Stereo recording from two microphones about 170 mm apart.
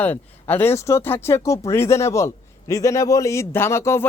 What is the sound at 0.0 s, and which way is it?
A man's voice, 10° left (ahead or behind).